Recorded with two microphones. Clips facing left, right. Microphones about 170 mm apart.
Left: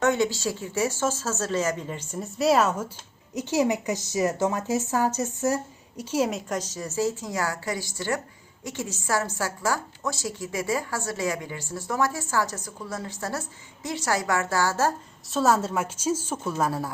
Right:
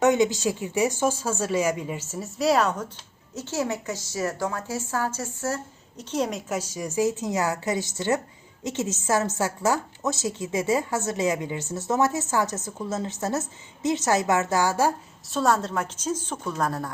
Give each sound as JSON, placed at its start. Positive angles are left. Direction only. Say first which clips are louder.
{"t": 0.0, "sound": "a woman's voice", "louder": "right 3 dB", "side_deg": -15}
{"t": 3.3, "sound": "speech", "louder": "left 4 dB", "side_deg": 15}
{"t": 6.0, "sound": "speech", "louder": "left 2 dB", "side_deg": 5}
{"t": 6.5, "sound": "a woman's voice", "louder": "right 1 dB", "side_deg": -10}
{"t": 15.3, "sound": "speech", "louder": "left 1 dB", "side_deg": 0}